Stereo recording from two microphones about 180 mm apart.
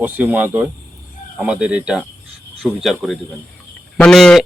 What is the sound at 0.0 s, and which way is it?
Speech, 10° right (ahead or behind).